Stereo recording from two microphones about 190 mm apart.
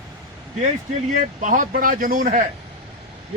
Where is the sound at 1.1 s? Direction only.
40° right (ahead or behind).